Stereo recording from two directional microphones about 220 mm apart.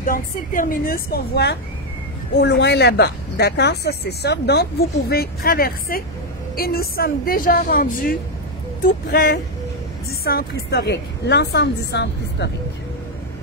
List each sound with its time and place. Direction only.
0.0 s a woman's voice: 40° left (ahead or behind)